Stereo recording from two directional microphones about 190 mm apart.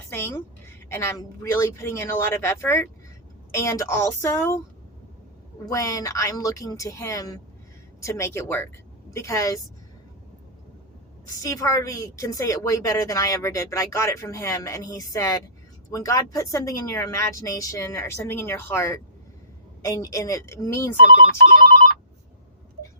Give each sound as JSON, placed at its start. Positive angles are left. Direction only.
{"t": 0.1, "sound": "a sound", "side_deg": 10}
{"t": 0.9, "sound": "a woman's voice", "side_deg": 15}
{"t": 5.6, "sound": "a woman's voice", "side_deg": 15}
{"t": 11.3, "sound": "a woman's voice", "side_deg": 15}